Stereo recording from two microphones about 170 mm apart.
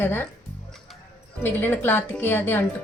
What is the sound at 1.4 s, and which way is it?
A woman's voice, 10° left (ahead or behind).